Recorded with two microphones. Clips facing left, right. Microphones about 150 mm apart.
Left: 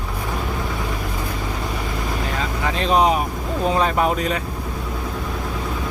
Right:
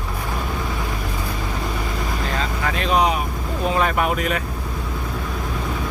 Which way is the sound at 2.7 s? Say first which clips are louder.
Left 2 dB; 35° left (ahead or behind).